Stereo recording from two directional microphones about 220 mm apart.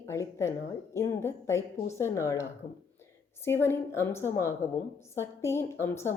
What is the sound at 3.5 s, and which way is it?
A woman's voice, 10° left (ahead or behind).